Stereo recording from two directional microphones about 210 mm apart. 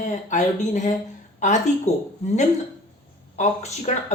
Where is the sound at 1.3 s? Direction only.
35° left (ahead or behind).